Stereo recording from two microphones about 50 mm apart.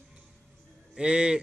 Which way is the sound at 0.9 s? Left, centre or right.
Centre.